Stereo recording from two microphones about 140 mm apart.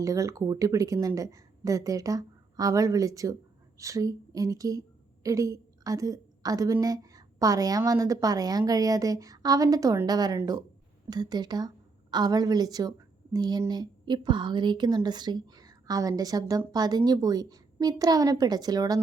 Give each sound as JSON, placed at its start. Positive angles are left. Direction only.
{"t": 0.0, "sound": "speech", "side_deg": -25}